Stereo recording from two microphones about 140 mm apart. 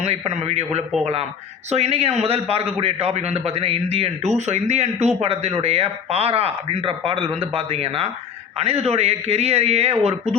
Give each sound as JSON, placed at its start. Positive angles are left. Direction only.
{"t": 0.0, "sound": "a man's voice", "side_deg": -50}